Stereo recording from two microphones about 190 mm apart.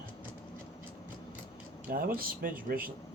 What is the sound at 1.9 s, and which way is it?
Speech, 50° right (ahead or behind).